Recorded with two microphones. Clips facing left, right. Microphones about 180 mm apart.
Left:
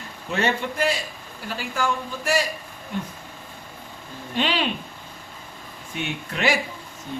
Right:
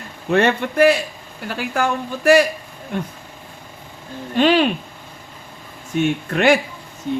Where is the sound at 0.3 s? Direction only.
60° right (ahead or behind).